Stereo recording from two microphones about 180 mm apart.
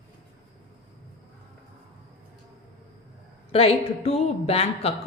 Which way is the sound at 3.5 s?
35° left (ahead or behind).